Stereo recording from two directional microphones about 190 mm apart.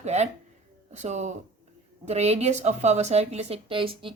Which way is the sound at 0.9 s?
35° right (ahead or behind).